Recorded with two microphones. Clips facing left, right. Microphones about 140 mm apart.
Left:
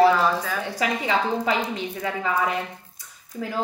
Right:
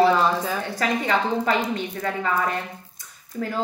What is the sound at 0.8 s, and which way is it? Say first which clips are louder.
Speech: right 1 dB; 10° left (ahead or behind).